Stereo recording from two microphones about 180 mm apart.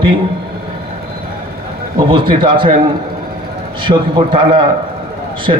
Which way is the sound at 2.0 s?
30° right (ahead or behind).